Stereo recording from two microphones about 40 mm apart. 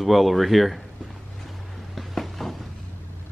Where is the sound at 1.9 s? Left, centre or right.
Centre.